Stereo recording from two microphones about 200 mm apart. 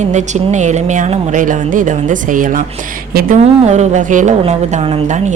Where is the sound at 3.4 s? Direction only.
30° right (ahead or behind).